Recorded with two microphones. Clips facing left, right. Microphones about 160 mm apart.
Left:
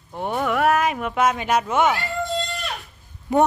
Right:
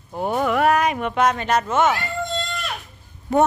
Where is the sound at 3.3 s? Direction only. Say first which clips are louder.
Even; 15° left (ahead or behind).